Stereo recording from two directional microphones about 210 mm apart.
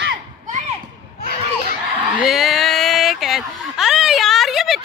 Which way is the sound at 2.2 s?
Centre (ahead or behind).